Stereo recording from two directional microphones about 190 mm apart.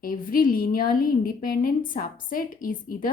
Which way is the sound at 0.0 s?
50° left (ahead or behind).